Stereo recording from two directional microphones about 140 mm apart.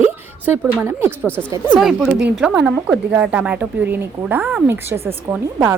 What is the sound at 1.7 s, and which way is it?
A woman's voice, centre (ahead or behind).